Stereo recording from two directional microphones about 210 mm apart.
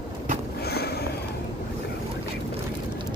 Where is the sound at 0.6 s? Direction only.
50° left (ahead or behind).